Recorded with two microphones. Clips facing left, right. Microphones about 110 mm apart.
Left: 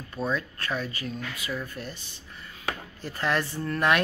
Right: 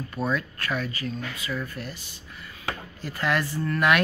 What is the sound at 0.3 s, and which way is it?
Speech, 30° left (ahead or behind).